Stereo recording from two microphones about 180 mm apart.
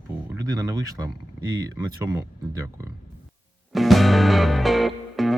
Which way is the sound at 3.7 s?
Centre (ahead or behind).